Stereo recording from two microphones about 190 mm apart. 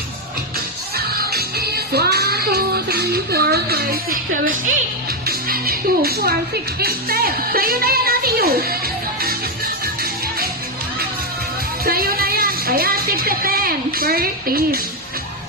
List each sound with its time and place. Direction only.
0.9 s music: 55° right (ahead or behind)
6.7 s speech: 55° right (ahead or behind)
9.8 s music: 50° right (ahead or behind)
11.9 s speech: 50° right (ahead or behind)